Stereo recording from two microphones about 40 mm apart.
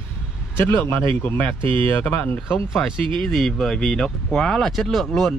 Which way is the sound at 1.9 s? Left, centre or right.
Left.